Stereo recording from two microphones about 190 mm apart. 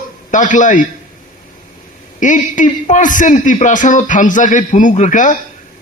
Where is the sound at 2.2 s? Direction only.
40° left (ahead or behind).